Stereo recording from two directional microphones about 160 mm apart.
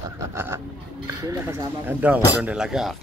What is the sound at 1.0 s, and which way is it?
Speech, 20° right (ahead or behind).